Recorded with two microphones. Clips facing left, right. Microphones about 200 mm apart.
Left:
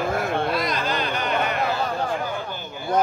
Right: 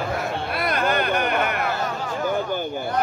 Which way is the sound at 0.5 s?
60° right (ahead or behind).